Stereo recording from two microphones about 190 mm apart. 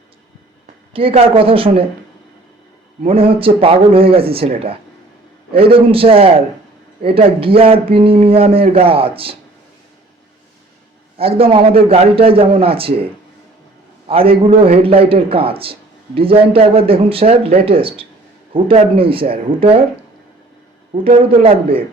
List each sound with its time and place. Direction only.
0.9 s speech: 30° right (ahead or behind)
3.1 s speech: 30° right (ahead or behind)
11.2 s speech: 30° right (ahead or behind)
14.1 s speech: 30° right (ahead or behind)
20.9 s a man's voice: 30° right (ahead or behind)